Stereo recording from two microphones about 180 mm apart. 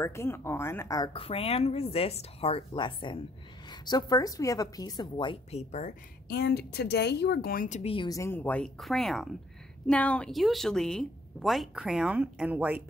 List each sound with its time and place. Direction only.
0.0 s speech: 15° left (ahead or behind); by 5.9 s 40° left (ahead or behind)
6.2 s speech: 60° left (ahead or behind)
7.9 s speech: 25° left (ahead or behind)
8.2 s a woman's voice: 10° left (ahead or behind); by 12.8 s 10° right (ahead or behind)